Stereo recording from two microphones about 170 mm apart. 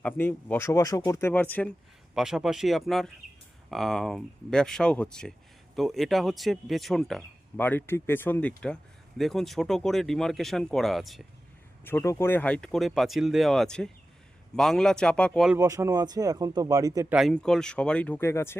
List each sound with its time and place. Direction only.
0.0 s speech: 10° left (ahead or behind)
2.1 s speech: centre (ahead or behind)
11.9 s speech: 15° left (ahead or behind)
15.5 s speech: 15° right (ahead or behind)
17.1 s speech: centre (ahead or behind); by 18.6 s 15° left (ahead or behind)